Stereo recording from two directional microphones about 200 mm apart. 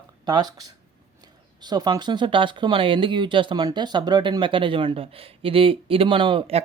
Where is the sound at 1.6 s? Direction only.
20° right (ahead or behind).